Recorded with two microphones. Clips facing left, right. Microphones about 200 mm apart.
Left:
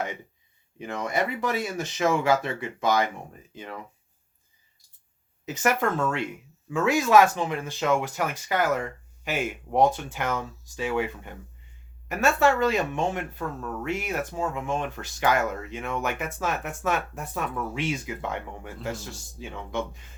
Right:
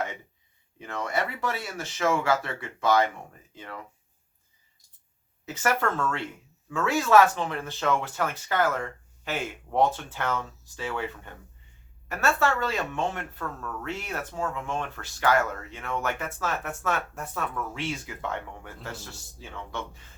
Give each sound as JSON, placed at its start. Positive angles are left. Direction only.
{"t": 0.8, "sound": "speech", "side_deg": 15}
{"t": 5.5, "sound": "speech", "side_deg": 15}